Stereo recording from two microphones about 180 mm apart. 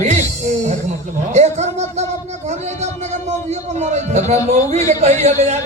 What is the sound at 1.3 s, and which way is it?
Speech, 40° right (ahead or behind).